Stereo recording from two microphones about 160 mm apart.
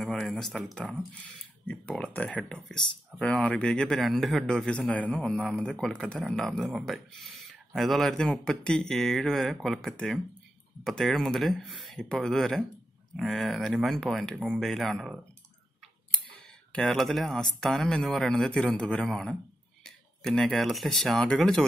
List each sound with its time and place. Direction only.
0.0 s speech: centre (ahead or behind)
1.7 s speech: 5° left (ahead or behind)
16.7 s speech: 5° left (ahead or behind)